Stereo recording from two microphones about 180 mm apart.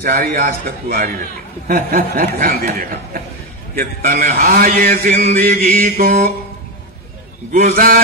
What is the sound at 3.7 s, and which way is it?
A man's voice, 45° right (ahead or behind).